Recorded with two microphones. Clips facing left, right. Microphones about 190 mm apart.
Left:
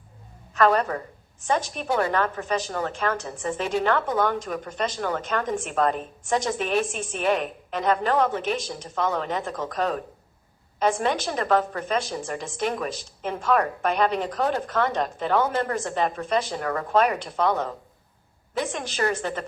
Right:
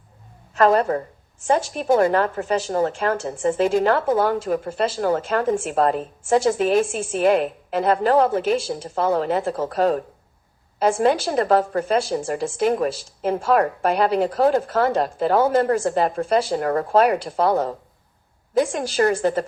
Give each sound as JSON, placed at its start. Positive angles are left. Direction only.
{"t": 0.5, "sound": "a woman's voice", "side_deg": -35}